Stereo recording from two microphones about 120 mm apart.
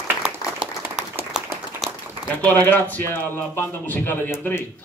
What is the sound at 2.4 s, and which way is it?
Speech, 15° left (ahead or behind).